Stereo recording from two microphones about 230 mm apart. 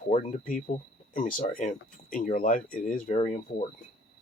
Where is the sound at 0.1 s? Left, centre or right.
Left.